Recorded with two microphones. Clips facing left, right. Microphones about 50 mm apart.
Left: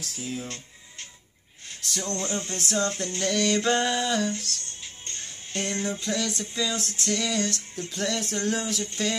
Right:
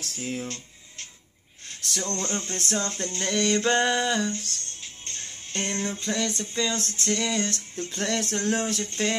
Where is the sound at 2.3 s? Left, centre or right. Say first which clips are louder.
Even; right.